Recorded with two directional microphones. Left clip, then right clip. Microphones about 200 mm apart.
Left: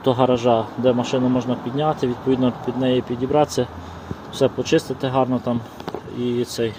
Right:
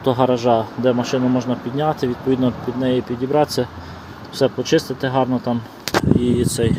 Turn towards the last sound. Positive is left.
turn(degrees=-25)  # may be behind; listen again after turning